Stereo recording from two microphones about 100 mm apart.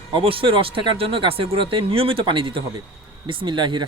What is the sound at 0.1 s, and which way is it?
Speech, 65° right (ahead or behind).